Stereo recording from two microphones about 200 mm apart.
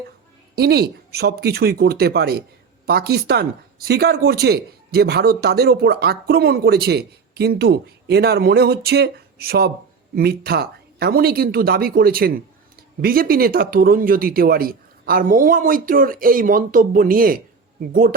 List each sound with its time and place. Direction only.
0.5 s speech: 55° right (ahead or behind)